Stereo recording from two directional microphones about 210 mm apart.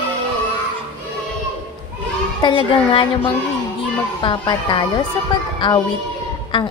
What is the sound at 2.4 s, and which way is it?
Speech, 25° left (ahead or behind).